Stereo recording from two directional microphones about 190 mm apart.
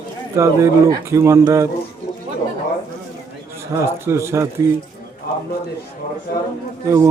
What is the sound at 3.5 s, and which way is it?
Speech, 15° right (ahead or behind).